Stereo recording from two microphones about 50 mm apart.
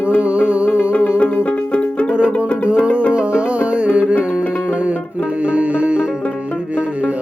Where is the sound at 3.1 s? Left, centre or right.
Right.